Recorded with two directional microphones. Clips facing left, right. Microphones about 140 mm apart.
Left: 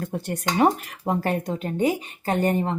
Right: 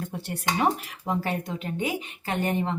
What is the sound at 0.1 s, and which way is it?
Speech, 45° left (ahead or behind).